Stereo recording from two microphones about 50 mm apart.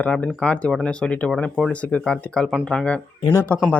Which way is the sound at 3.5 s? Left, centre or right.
Left.